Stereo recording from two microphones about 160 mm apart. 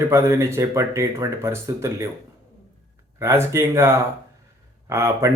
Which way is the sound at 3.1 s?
15° right (ahead or behind).